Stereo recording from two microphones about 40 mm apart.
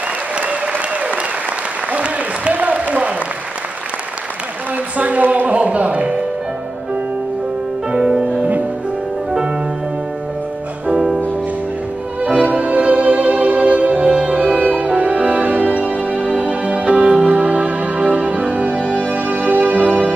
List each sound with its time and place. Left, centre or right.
0.4 s applause: right
4.9 s speech: right
5.5 s music: right
12.4 s music: right